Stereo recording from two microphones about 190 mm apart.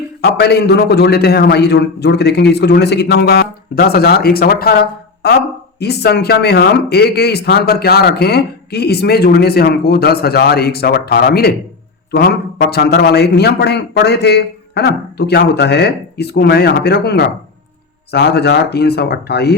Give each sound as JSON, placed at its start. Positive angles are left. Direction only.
{"t": 0.2, "sound": "speech", "side_deg": 60}